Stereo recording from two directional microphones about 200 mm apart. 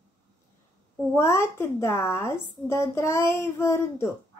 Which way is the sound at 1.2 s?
15° left (ahead or behind).